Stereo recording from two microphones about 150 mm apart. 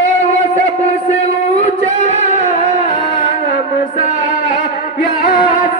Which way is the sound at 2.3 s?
50° left (ahead or behind).